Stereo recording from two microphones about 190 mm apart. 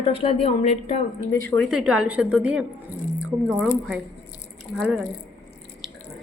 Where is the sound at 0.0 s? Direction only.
30° left (ahead or behind).